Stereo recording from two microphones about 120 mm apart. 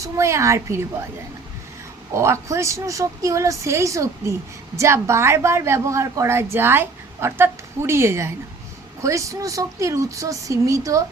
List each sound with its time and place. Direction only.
0.0 s a woman's voice: 25° right (ahead or behind)
2.1 s a woman's voice: 20° right (ahead or behind)